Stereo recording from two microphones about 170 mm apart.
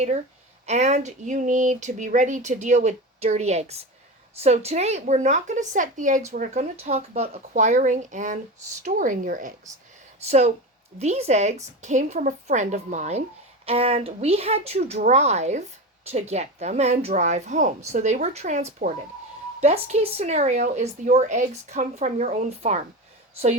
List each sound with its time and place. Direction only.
0.6 s a woman's voice: 40° right (ahead or behind)
10.2 s a woman's voice: 40° right (ahead or behind)